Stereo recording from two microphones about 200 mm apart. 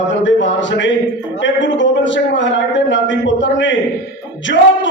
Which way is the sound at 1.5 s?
65° left (ahead or behind).